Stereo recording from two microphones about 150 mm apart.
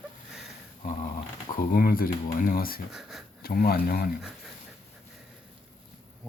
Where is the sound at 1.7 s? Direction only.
75° left (ahead or behind).